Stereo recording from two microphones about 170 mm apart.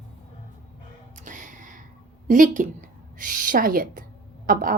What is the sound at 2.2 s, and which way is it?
A woman's voice, 50° right (ahead or behind).